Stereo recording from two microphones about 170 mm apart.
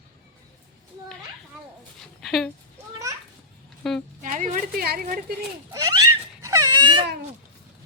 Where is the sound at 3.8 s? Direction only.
5° left (ahead or behind).